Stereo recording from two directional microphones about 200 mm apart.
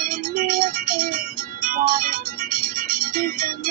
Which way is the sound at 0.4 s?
45° right (ahead or behind).